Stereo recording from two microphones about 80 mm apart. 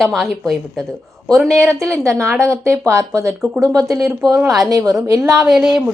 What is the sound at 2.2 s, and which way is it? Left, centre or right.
Speech, right.